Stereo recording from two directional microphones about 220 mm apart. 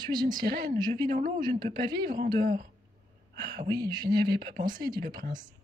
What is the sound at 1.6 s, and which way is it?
Speech, 20° right (ahead or behind).